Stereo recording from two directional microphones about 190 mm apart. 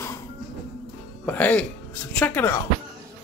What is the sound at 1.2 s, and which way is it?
Speech, 10° left (ahead or behind).